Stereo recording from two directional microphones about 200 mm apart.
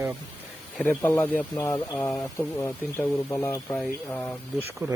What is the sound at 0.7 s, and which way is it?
Speech, 5° left (ahead or behind).